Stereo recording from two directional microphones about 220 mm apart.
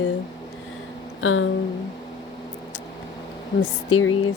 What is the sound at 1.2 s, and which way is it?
Speech, 65° left (ahead or behind).